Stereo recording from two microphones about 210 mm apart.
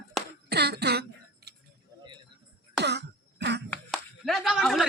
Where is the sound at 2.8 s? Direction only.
50° right (ahead or behind).